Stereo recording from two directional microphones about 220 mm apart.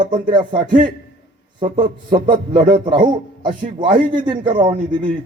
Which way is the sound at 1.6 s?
20° right (ahead or behind).